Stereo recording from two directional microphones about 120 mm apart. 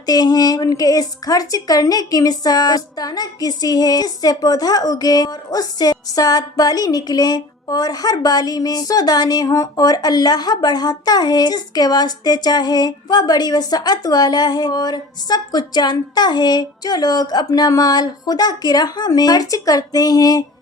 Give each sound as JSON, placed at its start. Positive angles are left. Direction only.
{"t": 0.0, "sound": "a woman's voice", "side_deg": 35}